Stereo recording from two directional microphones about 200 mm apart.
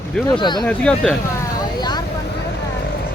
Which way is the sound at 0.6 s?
5° left (ahead or behind).